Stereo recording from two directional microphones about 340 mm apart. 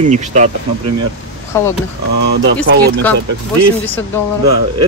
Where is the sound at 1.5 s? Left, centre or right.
Centre.